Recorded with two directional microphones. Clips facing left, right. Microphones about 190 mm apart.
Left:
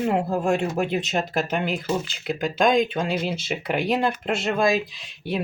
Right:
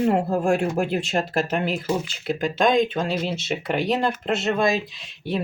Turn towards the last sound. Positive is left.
turn(degrees=0)  # may be behind; listen again after turning